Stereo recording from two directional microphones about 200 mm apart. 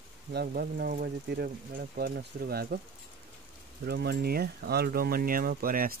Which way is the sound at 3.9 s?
55° right (ahead or behind).